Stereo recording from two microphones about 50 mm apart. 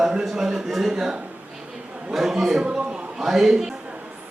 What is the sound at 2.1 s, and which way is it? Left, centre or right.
Speech, centre.